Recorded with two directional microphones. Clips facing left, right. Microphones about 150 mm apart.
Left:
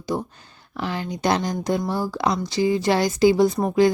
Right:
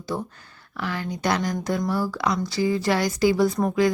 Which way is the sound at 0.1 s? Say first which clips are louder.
Left 3 dB; 20° left (ahead or behind).